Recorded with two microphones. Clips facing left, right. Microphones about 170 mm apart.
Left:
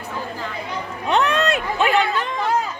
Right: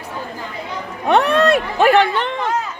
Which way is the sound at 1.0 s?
60° right (ahead or behind).